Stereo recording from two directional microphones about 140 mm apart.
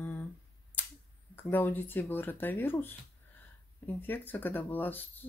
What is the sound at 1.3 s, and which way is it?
Speech, 15° left (ahead or behind).